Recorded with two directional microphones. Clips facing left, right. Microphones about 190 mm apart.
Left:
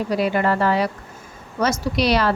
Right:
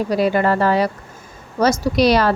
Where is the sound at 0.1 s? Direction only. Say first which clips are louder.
Right 3 dB; 40° right (ahead or behind).